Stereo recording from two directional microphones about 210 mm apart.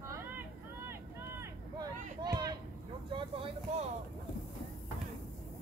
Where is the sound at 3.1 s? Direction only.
25° right (ahead or behind).